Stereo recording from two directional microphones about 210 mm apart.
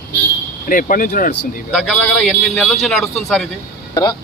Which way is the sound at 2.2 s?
5° left (ahead or behind).